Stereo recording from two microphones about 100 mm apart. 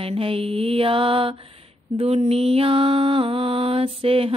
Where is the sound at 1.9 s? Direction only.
90° right.